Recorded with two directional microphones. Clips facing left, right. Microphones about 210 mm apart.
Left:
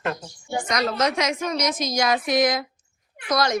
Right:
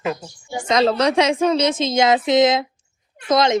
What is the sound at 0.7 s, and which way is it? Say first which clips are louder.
A woman's voice: right 8 dB; 25° right (ahead or behind).